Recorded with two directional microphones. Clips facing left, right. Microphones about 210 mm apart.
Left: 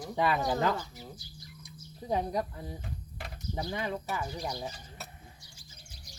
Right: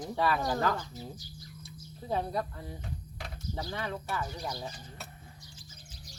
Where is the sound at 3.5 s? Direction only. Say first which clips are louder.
Left 3 dB; 15° left (ahead or behind).